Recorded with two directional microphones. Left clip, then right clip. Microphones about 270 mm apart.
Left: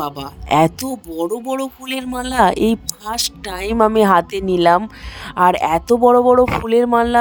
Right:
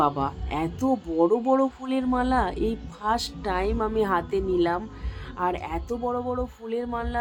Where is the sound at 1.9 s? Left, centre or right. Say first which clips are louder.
Left 1 dB; left.